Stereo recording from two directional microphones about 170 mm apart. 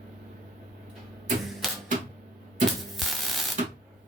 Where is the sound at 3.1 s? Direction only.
Centre (ahead or behind).